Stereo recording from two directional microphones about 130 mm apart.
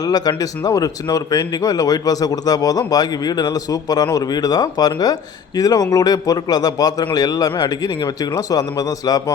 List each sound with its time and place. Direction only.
0.0 s speech: 30° left (ahead or behind)